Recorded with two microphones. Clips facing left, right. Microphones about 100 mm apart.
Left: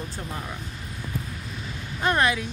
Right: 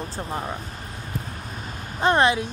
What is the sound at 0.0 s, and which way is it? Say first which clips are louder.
Speech: right 5 dB; 35° right (ahead or behind).